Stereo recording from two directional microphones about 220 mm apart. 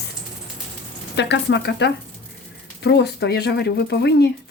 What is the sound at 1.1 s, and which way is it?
Speech, 50° left (ahead or behind).